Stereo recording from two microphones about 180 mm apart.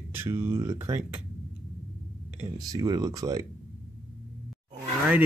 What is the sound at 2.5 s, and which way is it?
Speech, 20° right (ahead or behind).